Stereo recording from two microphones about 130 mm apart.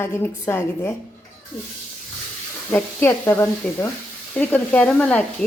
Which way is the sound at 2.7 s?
15° left (ahead or behind).